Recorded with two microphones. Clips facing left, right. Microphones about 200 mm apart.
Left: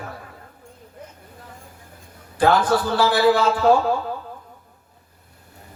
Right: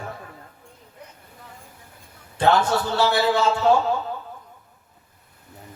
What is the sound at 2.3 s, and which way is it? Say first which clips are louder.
Speech: left 2 dB; 25° right (ahead or behind).